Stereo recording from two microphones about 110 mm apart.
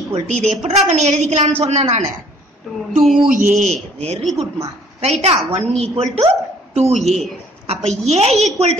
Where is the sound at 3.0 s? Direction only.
5° right (ahead or behind).